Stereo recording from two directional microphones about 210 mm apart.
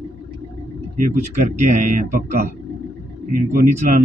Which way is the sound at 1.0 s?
35° right (ahead or behind).